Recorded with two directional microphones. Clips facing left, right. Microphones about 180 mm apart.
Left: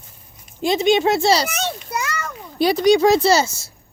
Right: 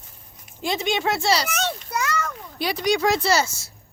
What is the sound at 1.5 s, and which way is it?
Children playing, 5° left (ahead or behind).